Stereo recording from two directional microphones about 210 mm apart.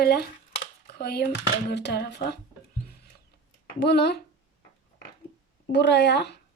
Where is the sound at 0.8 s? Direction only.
50° left (ahead or behind).